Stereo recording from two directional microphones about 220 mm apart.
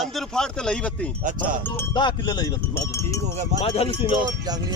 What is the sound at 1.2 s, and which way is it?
Speech, 35° right (ahead or behind).